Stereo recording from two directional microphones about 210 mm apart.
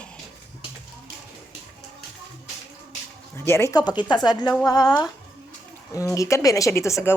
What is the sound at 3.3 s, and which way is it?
Speech, 10° left (ahead or behind).